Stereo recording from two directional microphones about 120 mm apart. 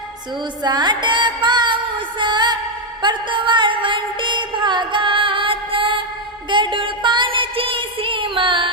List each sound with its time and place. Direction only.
0.6 s music: 35° right (ahead or behind)